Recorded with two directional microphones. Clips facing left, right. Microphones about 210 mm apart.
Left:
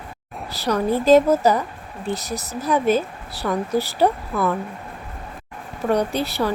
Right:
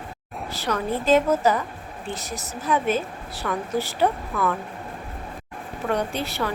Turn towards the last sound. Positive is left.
turn(degrees=35)  # may be behind; listen again after turning